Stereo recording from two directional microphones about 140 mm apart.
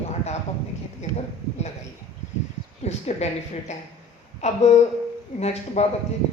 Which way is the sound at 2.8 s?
50° left (ahead or behind).